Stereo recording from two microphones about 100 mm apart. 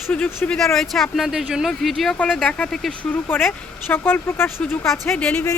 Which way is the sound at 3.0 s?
20° left (ahead or behind).